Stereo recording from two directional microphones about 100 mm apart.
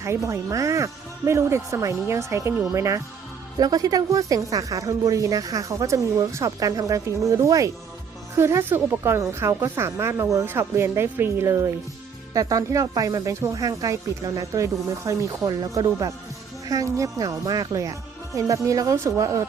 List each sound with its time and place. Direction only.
0.0 s a woman's voice: 30° right (ahead or behind)